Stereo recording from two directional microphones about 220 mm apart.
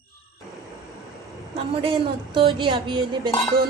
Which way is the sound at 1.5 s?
25° right (ahead or behind).